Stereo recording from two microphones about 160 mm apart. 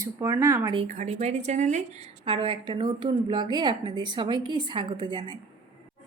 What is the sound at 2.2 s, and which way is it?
Speech, 35° right (ahead or behind).